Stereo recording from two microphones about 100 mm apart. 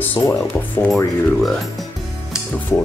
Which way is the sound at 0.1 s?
20° left (ahead or behind).